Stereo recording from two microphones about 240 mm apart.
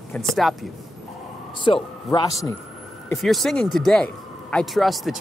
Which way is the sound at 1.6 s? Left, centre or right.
Centre.